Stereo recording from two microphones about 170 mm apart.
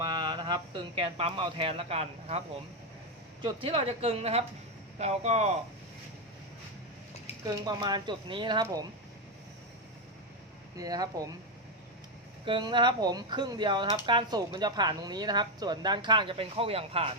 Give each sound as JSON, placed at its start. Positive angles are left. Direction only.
{"t": 0.0, "sound": "speech", "side_deg": -25}
{"t": 3.4, "sound": "speech", "side_deg": -30}
{"t": 7.4, "sound": "speech", "side_deg": -25}
{"t": 10.8, "sound": "speech", "side_deg": -20}
{"t": 12.5, "sound": "speech", "side_deg": -25}